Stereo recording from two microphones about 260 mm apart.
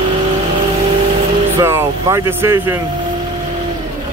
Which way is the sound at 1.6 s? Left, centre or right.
Centre.